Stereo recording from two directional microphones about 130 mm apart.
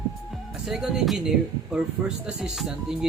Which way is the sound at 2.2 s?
5° right (ahead or behind).